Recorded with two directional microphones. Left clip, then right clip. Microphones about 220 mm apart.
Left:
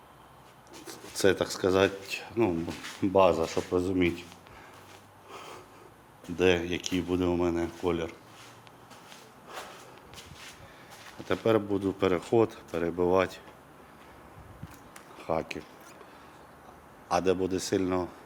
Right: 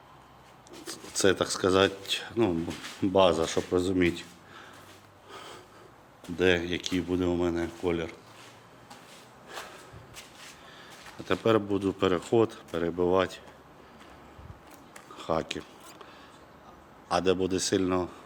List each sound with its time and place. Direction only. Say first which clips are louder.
1.1 s speech: right 1 dB; 10° right (ahead or behind)
5.3 s snort: even; centre (ahead or behind)
6.3 s speech: even; centre (ahead or behind)
11.3 s speech: right 1 dB; 10° right (ahead or behind)
15.2 s speech: right 1 dB; 20° right (ahead or behind)
17.1 s speech: right 1 dB; 10° right (ahead or behind)